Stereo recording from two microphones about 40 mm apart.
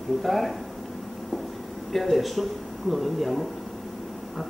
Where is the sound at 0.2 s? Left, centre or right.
Centre.